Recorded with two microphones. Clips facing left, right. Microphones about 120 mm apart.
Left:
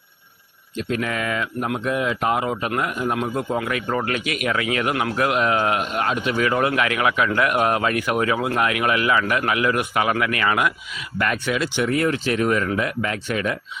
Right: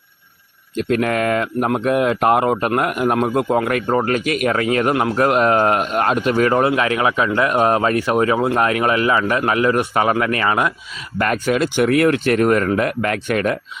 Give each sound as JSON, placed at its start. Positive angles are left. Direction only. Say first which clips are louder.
{"t": 0.8, "sound": "speech", "louder": "right 7 dB", "side_deg": -55}
{"t": 3.6, "sound": "speech", "louder": "right 6 dB", "side_deg": -50}
{"t": 3.8, "sound": "a man's voice", "louder": "right 6 dB", "side_deg": -35}
{"t": 11.2, "sound": "speech", "louder": "right 5 dB", "side_deg": -45}